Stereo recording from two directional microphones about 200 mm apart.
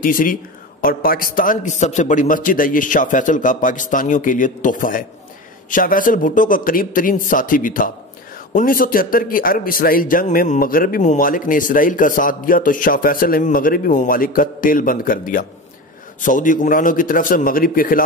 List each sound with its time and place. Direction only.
0.0 s a man's voice: 45° left (ahead or behind)